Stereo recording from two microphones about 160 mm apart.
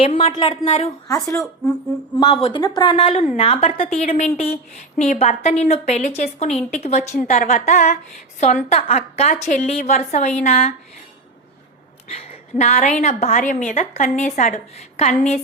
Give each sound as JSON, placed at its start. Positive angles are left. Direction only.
{"t": 0.0, "sound": "a woman's voice", "side_deg": 40}
{"t": 1.0, "sound": "speech", "side_deg": 20}
{"t": 2.1, "sound": "a woman's voice", "side_deg": 35}
{"t": 3.9, "sound": "a woman's voice", "side_deg": 50}
{"t": 12.0, "sound": "a woman's voice", "side_deg": 40}